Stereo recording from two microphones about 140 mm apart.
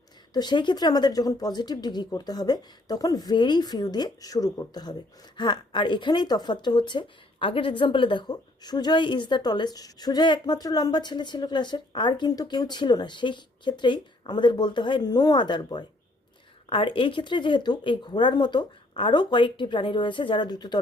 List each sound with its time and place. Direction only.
0.3 s speech: 30° left (ahead or behind)